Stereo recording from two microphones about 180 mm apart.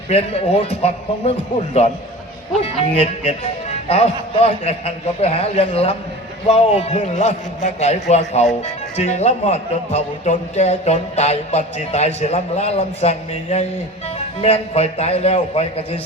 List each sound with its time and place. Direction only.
0.1 s speech: 35° left (ahead or behind)
2.9 s speech: 35° left (ahead or behind)